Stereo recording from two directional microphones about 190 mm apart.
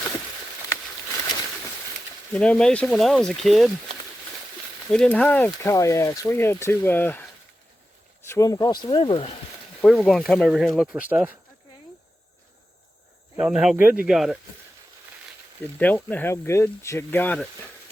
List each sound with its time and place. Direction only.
2.3 s speech: 5° left (ahead or behind)
4.9 s speech: 5° left (ahead or behind)
8.3 s speech: 20° left (ahead or behind)
9.8 s speech: centre (ahead or behind)
13.4 s speech: 5° right (ahead or behind)
15.8 s speech: 10° left (ahead or behind)